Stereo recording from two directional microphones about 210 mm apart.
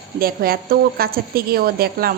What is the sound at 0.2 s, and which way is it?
A woman's voice, 45° right (ahead or behind).